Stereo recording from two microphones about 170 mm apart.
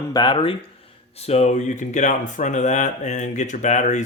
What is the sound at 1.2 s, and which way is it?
Speech, 40° left (ahead or behind).